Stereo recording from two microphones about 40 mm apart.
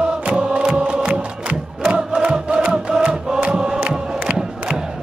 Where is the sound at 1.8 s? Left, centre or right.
Right.